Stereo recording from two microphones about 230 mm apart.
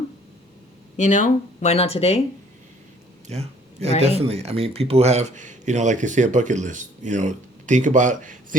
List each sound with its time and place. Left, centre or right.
0.9 s speech: left
3.2 s a sound: right
4.0 s speech: right